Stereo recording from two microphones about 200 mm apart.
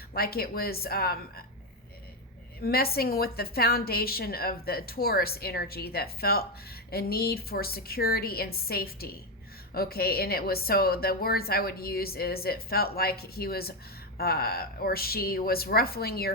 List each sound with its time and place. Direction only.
0.1 s a woman's voice: 50° left (ahead or behind)
2.6 s a woman's voice: 50° left (ahead or behind)